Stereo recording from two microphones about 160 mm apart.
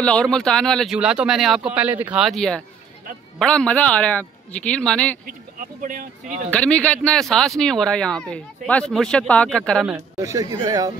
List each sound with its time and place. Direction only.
0.0 s a man's voice: 5° left (ahead or behind)
5.6 s speech: 55° right (ahead or behind)
6.5 s speech: 10° left (ahead or behind)
10.1 s speech: 20° right (ahead or behind)